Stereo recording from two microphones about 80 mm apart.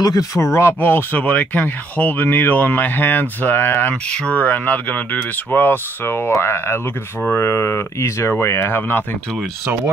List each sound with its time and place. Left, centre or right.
0.3 s speech: left
3.9 s speech: centre